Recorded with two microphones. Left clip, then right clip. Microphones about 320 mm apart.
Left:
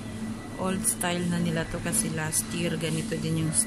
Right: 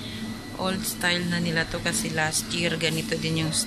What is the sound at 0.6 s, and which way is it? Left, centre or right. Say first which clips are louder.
Speech: right 3 dB; centre.